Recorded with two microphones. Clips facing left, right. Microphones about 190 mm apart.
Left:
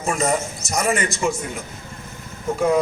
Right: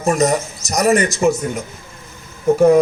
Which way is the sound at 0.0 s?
40° right (ahead or behind).